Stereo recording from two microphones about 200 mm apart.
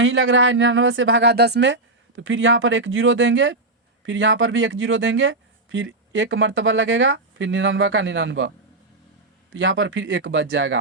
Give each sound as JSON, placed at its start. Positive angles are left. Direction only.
{"t": 0.0, "sound": "speech", "side_deg": -75}